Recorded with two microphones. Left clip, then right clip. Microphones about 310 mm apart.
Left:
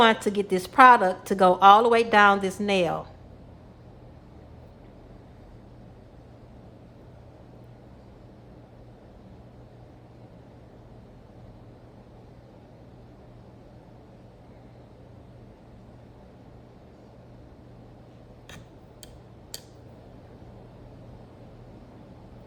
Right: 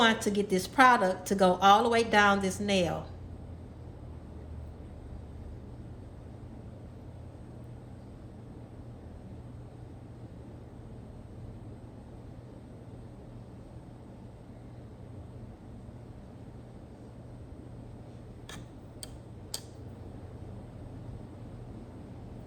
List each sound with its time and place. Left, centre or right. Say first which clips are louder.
0.0 s a woman's voice: left 6 dB; centre